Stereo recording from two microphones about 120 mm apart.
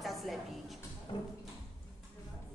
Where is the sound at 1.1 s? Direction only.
40° left (ahead or behind).